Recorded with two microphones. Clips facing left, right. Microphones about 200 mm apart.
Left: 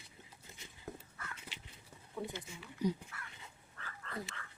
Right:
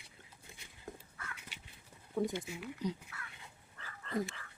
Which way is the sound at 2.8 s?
10° left (ahead or behind).